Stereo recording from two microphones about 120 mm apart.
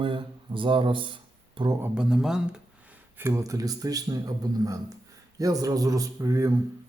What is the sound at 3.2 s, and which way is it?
A man's voice, 20° right (ahead or behind).